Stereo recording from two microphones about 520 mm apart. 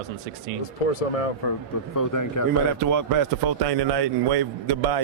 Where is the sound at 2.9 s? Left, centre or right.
Right.